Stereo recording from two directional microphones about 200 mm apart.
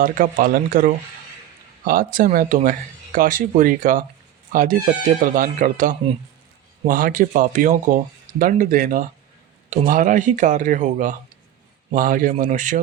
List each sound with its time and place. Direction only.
0.0 s speech: 45° right (ahead or behind)